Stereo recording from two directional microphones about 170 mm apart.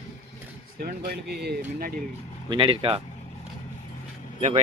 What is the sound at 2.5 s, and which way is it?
Speech, 30° right (ahead or behind).